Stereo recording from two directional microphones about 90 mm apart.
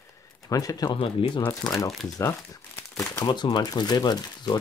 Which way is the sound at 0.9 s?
85° left.